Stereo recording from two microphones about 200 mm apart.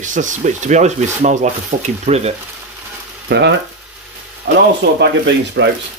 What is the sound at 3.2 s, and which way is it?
Speech, 60° right (ahead or behind).